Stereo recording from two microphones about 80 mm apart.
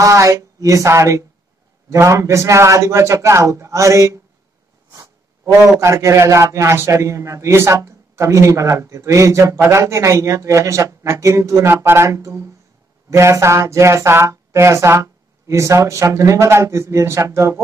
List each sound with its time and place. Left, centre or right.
0.0 s a man's voice: right
5.8 s a man's voice: right